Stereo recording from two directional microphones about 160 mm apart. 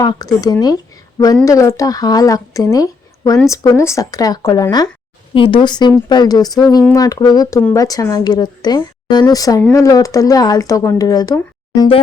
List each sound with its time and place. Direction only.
0.0 s speech: 25° left (ahead or behind)